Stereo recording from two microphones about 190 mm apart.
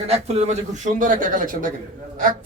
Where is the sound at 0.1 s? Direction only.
35° right (ahead or behind).